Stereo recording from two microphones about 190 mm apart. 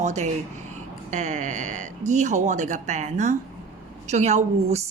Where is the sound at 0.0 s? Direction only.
35° right (ahead or behind).